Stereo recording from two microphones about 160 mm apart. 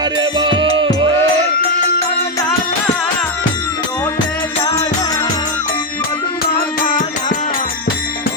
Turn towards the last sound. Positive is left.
turn(degrees=50)  # may be behind; listen again after turning